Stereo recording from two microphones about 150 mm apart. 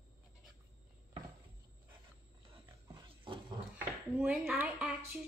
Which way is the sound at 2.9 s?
30° right (ahead or behind).